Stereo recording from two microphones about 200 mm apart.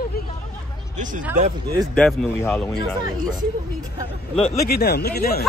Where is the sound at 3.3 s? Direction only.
20° right (ahead or behind).